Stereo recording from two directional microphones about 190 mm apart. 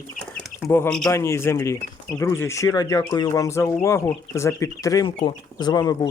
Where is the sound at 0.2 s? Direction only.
Centre (ahead or behind).